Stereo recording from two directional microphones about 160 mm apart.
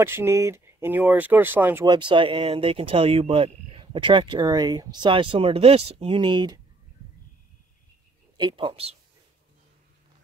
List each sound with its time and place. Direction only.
0.0 s speech: 15° right (ahead or behind)
1.9 s speech: 30° right (ahead or behind)
8.4 s speech: 30° right (ahead or behind)